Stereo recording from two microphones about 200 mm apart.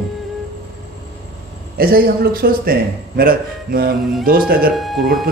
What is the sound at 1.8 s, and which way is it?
A man's voice, 50° right (ahead or behind).